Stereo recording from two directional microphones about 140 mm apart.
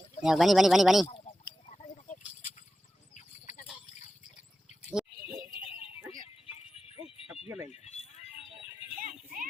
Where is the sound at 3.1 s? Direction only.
60° left (ahead or behind).